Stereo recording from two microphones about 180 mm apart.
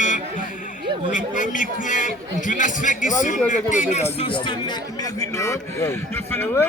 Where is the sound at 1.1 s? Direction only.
45° left (ahead or behind).